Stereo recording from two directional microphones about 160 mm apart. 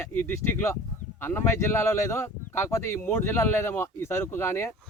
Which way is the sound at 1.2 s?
15° left (ahead or behind).